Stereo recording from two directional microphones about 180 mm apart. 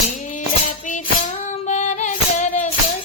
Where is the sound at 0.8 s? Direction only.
45° left (ahead or behind).